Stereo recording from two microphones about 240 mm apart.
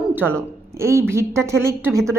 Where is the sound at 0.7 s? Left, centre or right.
Centre.